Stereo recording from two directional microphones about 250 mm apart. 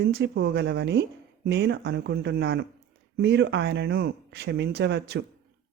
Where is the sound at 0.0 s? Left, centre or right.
Right.